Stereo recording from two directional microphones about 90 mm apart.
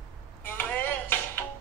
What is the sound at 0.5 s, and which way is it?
Music, 20° left (ahead or behind).